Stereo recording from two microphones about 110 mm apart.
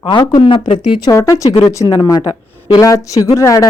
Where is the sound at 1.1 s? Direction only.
30° left (ahead or behind).